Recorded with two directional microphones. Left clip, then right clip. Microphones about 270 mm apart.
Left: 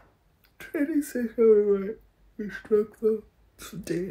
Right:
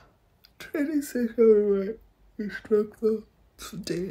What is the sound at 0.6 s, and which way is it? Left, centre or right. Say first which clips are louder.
Speech: left 1 dB; centre.